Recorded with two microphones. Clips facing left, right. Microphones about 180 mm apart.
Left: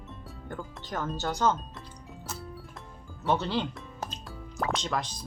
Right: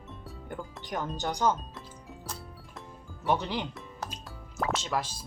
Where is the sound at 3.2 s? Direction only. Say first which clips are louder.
Left 1 dB; 15° right (ahead or behind).